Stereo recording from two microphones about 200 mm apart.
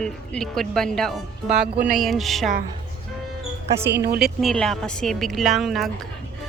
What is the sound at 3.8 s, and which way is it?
Speech, 10° right (ahead or behind).